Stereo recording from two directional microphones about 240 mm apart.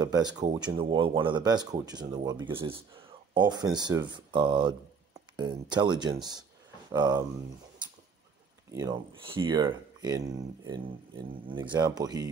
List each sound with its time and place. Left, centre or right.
0.0 s speech: centre
8.7 s speech: centre